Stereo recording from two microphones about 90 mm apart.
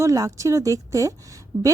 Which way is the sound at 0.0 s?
35° right (ahead or behind).